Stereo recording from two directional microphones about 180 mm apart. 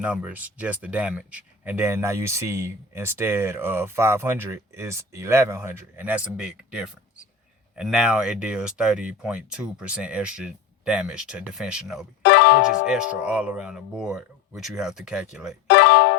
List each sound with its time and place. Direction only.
0.0 s speech: 5° right (ahead or behind)
12.2 s music: 80° left
12.9 s speech: 5° right (ahead or behind)
15.6 s music: 75° left (ahead or behind)